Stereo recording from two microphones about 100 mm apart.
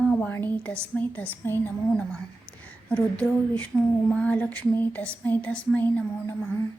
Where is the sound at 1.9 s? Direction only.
10° left (ahead or behind).